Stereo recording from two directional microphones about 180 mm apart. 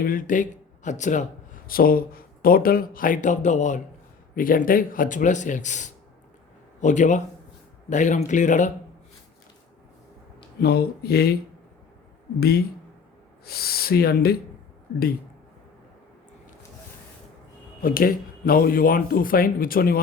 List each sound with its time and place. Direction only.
0.0 s speech: 50° left (ahead or behind)
1.6 s speech: 55° left (ahead or behind)
10.6 s speech: 60° left (ahead or behind)
12.4 s speech: 60° left (ahead or behind)
17.8 s speech: 55° left (ahead or behind)